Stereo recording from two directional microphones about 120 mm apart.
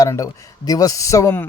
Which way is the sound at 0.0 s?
30° left (ahead or behind).